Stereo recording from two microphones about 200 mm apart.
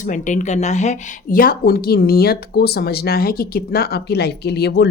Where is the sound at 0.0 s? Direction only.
40° left (ahead or behind).